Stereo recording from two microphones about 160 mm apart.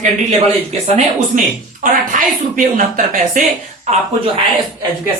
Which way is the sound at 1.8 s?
55° right (ahead or behind).